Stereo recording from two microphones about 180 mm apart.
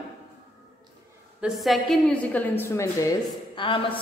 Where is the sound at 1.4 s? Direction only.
Centre (ahead or behind); by 3.2 s 15° left (ahead or behind).